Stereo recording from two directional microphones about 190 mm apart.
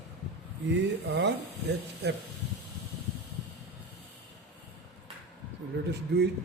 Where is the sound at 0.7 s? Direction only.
65° right (ahead or behind).